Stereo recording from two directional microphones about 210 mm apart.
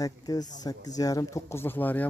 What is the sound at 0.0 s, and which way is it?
Speech, 20° left (ahead or behind).